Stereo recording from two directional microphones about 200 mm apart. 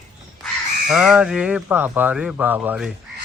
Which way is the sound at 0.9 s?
Centre (ahead or behind).